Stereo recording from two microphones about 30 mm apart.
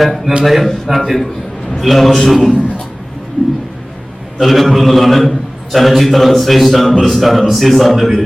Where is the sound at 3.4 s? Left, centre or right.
Left.